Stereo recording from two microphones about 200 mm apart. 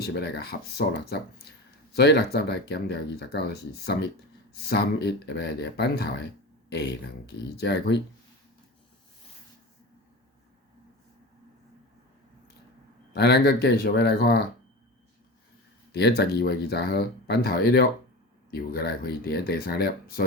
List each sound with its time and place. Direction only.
0.0 s speech: 55° left (ahead or behind)
7.3 s speech: 55° left (ahead or behind)
13.1 s speech: 55° left (ahead or behind)
15.9 s speech: 55° left (ahead or behind)